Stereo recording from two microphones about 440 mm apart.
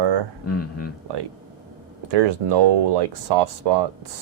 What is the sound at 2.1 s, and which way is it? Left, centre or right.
Speech, right.